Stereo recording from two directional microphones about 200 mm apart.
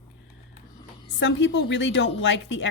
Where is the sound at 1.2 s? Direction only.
65° left (ahead or behind).